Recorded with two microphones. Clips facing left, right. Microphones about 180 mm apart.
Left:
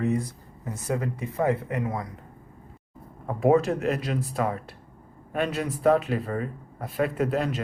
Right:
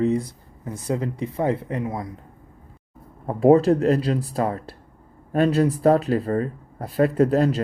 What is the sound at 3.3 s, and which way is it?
Speech, 35° right (ahead or behind).